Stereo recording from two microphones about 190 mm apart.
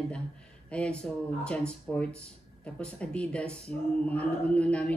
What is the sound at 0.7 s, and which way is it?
A woman's voice, 5° left (ahead or behind).